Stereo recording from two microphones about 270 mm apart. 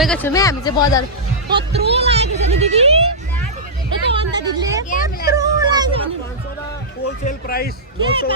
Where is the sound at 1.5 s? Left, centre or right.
Right.